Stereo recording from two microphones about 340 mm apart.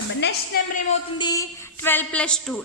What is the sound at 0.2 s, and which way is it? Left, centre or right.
Speech, left.